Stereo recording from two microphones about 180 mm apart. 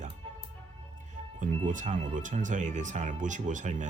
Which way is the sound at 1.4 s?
45° right (ahead or behind).